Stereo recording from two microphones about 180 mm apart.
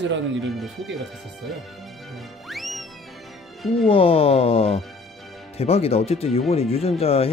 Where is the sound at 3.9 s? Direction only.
30° left (ahead or behind).